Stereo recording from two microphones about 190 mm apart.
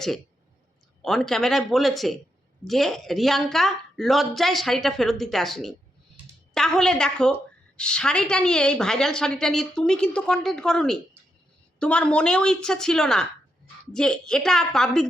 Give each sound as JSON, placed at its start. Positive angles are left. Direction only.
{"t": 1.0, "sound": "a woman's voice", "side_deg": 0}